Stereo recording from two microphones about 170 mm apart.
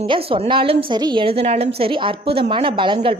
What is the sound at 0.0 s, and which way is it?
A woman's voice, 35° right (ahead or behind).